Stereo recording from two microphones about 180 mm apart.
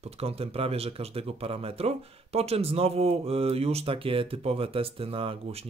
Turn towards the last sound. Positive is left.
turn(degrees=-30)  # may be behind; listen again after turning